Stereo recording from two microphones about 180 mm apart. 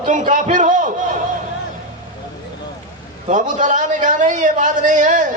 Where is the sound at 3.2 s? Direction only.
45° right (ahead or behind).